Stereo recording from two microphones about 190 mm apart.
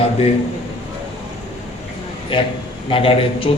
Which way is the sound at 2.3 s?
25° left (ahead or behind).